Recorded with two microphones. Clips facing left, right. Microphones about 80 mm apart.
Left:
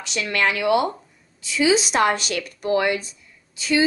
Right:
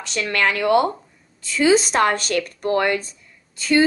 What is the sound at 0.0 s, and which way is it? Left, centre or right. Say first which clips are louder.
A woman's voice: right 1 dB; right.